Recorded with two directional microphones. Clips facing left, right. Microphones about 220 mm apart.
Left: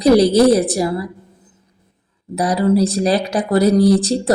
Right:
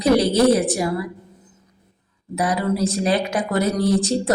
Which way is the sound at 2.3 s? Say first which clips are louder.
Left 6 dB; 35° left (ahead or behind).